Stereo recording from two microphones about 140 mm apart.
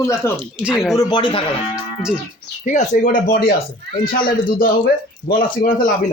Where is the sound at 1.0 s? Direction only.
30° left (ahead or behind).